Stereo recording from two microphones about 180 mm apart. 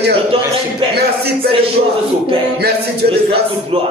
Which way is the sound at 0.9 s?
60° right (ahead or behind).